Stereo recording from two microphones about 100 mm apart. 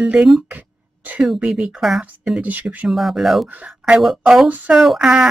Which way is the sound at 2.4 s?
15° right (ahead or behind).